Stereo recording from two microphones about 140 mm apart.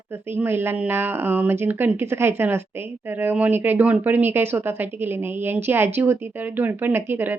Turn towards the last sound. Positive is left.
turn(degrees=-15)  # may be behind; listen again after turning